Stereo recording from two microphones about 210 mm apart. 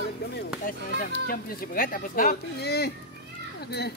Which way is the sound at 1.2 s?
45° left (ahead or behind).